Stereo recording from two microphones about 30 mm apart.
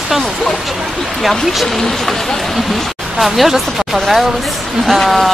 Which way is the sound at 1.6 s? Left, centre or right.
Centre.